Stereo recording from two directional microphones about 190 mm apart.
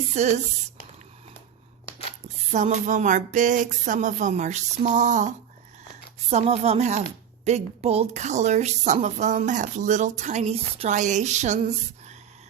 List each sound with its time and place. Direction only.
0.1 s a woman's voice: 35° right (ahead or behind)
2.5 s a woman's voice: 40° right (ahead or behind)
6.3 s a woman's voice: 35° right (ahead or behind)